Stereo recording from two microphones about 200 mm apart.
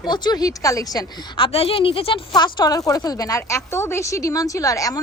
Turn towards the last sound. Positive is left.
turn(degrees=15)  # may be behind; listen again after turning